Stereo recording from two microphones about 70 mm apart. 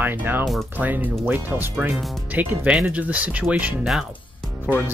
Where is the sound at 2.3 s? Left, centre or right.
Right.